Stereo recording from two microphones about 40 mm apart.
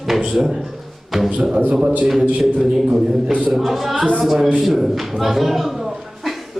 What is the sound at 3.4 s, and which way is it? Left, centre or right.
A man's voice, centre.